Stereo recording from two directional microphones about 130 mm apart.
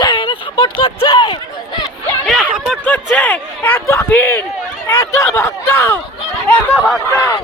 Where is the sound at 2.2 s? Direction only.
5° right (ahead or behind).